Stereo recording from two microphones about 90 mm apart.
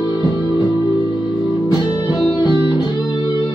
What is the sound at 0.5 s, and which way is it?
Music, 40° left (ahead or behind).